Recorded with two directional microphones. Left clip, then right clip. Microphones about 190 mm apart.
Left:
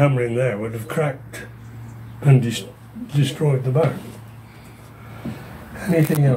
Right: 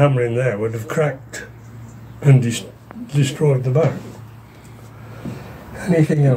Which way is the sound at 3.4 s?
25° right (ahead or behind).